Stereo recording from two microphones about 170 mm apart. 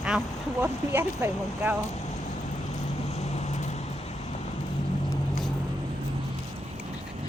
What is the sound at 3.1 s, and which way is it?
Vehicle, 40° left (ahead or behind).